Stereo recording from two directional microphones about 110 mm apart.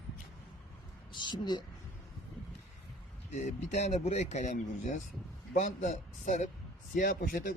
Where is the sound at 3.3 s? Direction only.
90° left.